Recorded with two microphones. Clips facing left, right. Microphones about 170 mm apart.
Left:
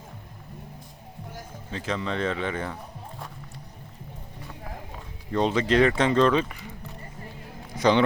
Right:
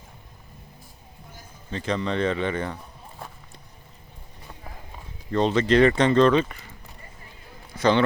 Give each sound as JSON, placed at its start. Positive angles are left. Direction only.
{"t": 1.7, "sound": "speech", "side_deg": 5}
{"t": 5.3, "sound": "speech", "side_deg": 10}
{"t": 7.8, "sound": "a man's voice", "side_deg": 15}